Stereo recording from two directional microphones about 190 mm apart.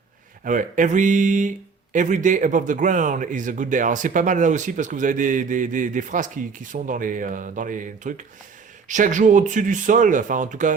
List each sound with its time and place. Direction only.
0.4 s speech: 40° right (ahead or behind)